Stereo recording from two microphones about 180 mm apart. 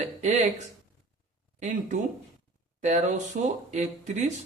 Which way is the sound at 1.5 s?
40° right (ahead or behind).